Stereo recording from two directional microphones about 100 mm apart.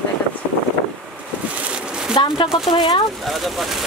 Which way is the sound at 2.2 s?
55° left (ahead or behind).